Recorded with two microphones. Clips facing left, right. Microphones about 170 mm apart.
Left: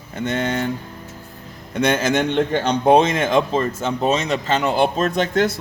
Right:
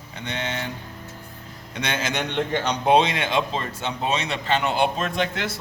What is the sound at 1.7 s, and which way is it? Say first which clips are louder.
A man's voice: left 9 dB; 50° left (ahead or behind).